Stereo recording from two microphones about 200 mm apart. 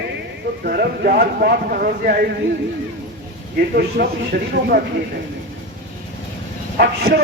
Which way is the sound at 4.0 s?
50° right (ahead or behind).